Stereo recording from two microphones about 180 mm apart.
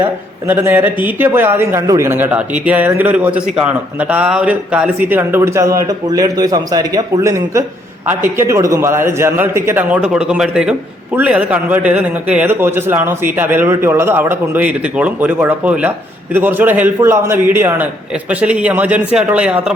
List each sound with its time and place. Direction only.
0.4 s a man's voice: 10° right (ahead or behind)